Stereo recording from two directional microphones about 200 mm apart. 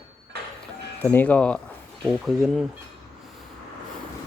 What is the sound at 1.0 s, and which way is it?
Speech, 10° left (ahead or behind).